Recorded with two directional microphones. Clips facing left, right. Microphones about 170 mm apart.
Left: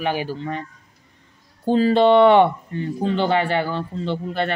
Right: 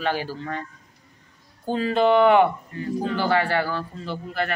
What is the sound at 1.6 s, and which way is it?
Speech, 30° left (ahead or behind).